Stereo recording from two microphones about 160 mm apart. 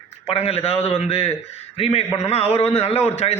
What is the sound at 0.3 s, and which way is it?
A man's voice, 40° left (ahead or behind).